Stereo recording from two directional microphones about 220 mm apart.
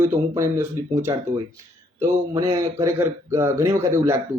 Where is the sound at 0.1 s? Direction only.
10° right (ahead or behind).